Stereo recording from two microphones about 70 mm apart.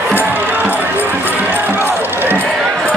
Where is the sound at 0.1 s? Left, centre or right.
Right.